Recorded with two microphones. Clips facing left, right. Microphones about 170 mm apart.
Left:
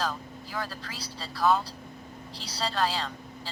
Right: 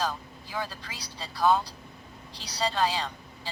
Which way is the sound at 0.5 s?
20° right (ahead or behind).